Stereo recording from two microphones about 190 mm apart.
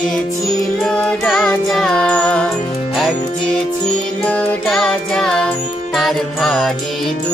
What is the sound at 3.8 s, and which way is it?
Music, 5° left (ahead or behind).